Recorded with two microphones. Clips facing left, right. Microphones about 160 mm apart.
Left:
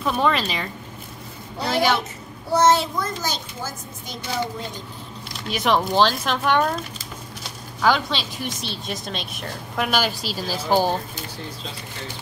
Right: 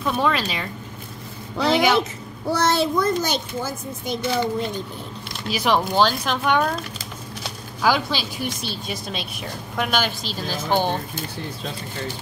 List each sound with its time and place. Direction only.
0.0 s a woman's voice: centre (ahead or behind)
2.5 s a child's voice: 70° right (ahead or behind)
5.5 s a woman's voice: centre (ahead or behind)
7.8 s a woman's voice: 5° right (ahead or behind)